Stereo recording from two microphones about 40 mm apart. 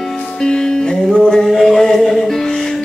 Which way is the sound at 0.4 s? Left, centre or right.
Centre.